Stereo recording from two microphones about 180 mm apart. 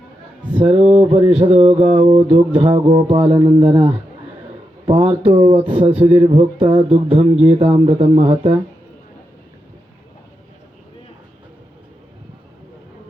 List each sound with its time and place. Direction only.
0.5 s speech: 30° right (ahead or behind)
1.8 s mantra: 40° right (ahead or behind)
2.6 s speech: 30° right (ahead or behind)
2.9 s mantra: 30° right (ahead or behind)
4.9 s speech: 30° right (ahead or behind)